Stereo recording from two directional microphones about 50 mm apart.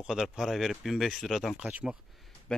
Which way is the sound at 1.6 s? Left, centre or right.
Right.